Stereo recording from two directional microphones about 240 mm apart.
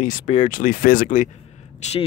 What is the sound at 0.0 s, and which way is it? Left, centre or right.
Speech, left.